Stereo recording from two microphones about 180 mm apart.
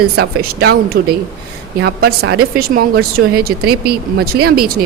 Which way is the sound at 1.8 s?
65° right (ahead or behind).